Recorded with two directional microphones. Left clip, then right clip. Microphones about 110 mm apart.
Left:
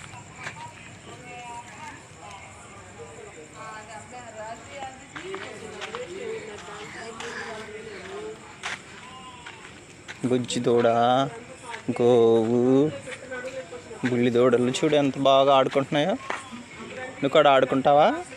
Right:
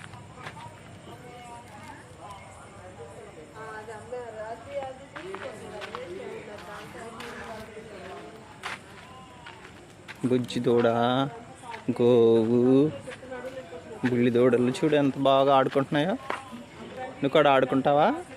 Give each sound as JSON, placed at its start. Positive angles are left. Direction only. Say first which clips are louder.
{"t": 10.3, "sound": "speech", "louder": "left 2 dB", "side_deg": -10}
{"t": 14.2, "sound": "speech", "louder": "left 2 dB", "side_deg": -5}
{"t": 17.2, "sound": "speech", "louder": "left 3 dB", "side_deg": 0}